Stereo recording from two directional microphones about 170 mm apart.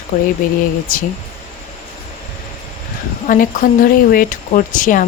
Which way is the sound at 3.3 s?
55° left (ahead or behind).